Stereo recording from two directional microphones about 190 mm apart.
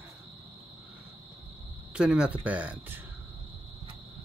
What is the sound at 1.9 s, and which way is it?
Speech, 5° right (ahead or behind).